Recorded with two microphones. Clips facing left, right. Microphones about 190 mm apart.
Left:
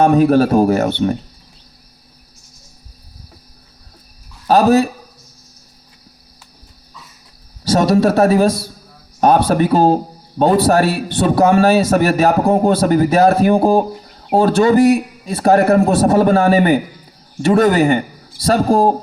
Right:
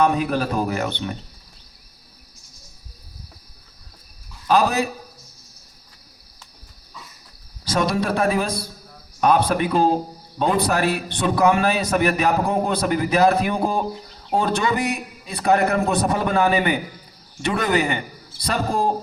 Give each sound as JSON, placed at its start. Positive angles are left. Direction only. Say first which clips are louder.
{"t": 0.0, "sound": "a man's voice", "louder": "left 9 dB", "side_deg": 45}
{"t": 4.4, "sound": "a man's voice", "louder": "left 7 dB", "side_deg": 40}
{"t": 7.7, "sound": "a man's voice", "louder": "left 8 dB", "side_deg": 40}